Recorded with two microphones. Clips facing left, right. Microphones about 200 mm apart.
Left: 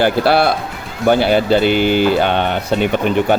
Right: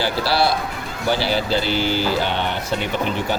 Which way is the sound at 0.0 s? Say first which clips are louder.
Left 7 dB; 55° left (ahead or behind).